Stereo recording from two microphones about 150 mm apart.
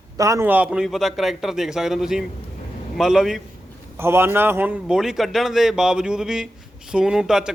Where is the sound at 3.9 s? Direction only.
15° right (ahead or behind).